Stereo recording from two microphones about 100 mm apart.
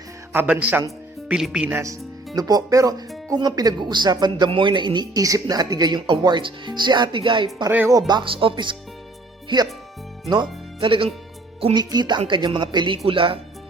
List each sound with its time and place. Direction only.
0.3 s speech: 15° right (ahead or behind)
2.3 s speech: 40° right (ahead or behind); by 7.4 s 55° right (ahead or behind)
7.9 s speech: 40° right (ahead or behind)
10.8 s speech: 60° right (ahead or behind)
11.7 s speech: 45° right (ahead or behind)
13.1 s speech: 65° right (ahead or behind)